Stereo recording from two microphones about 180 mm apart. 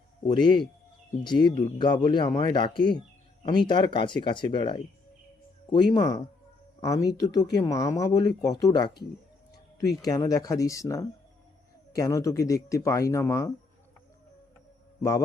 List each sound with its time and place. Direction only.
0.3 s speech: 25° left (ahead or behind)